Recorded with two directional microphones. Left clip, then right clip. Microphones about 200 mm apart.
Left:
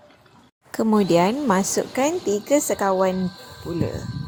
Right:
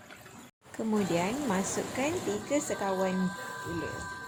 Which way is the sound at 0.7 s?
45° left (ahead or behind).